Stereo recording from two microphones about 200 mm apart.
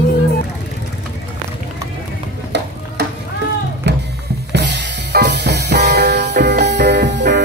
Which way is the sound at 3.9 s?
55° right (ahead or behind).